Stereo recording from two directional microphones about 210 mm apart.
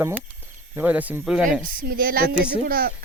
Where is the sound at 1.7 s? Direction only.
40° right (ahead or behind).